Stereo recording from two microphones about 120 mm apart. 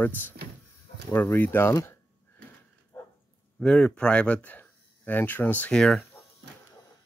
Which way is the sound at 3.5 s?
5° left (ahead or behind).